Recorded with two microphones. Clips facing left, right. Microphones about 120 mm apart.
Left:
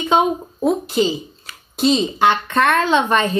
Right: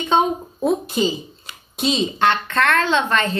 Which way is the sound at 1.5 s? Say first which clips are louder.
Even; 15° right (ahead or behind).